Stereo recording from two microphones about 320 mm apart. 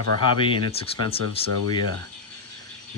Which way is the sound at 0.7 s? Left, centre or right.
Centre.